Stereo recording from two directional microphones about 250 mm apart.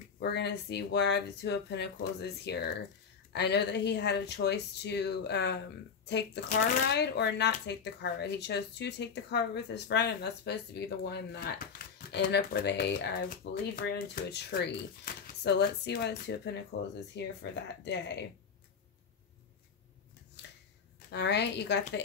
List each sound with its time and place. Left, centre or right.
0.2 s speech: left
21.1 s speech: left